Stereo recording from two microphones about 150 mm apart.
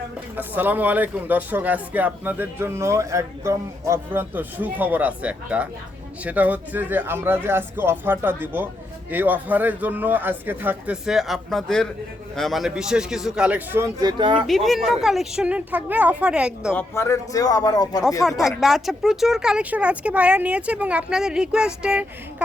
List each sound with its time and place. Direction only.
0.3 s speech: 10° right (ahead or behind); by 14.4 s 30° right (ahead or behind)
14.4 s speech: centre (ahead or behind)
16.7 s speech: 20° left (ahead or behind)
18.2 s speech: centre (ahead or behind)